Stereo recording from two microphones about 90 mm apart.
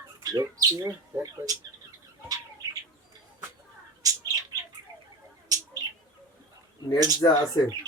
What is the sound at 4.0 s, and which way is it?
Bird, 45° right (ahead or behind).